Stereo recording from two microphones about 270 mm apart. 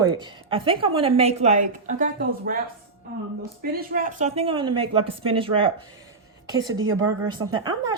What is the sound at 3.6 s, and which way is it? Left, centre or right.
A woman's voice, right.